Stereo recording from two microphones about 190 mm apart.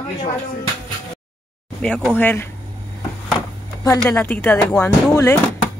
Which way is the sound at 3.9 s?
10° left (ahead or behind).